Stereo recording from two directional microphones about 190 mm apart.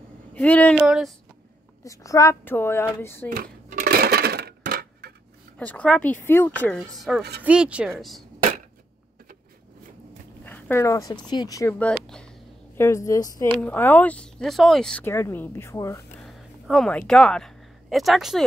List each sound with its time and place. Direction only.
0.3 s speech: 10° left (ahead or behind)
0.7 s speech: 5° right (ahead or behind)
1.9 s speech: 15° left (ahead or behind)
3.3 s dishes: 50° right (ahead or behind)
5.6 s speech: 5° left (ahead or behind)
10.4 s speech: 10° left (ahead or behind)
11.8 s a sound: 5° left (ahead or behind)
12.7 s speech: 15° left (ahead or behind)
16.3 s speech: centre (ahead or behind)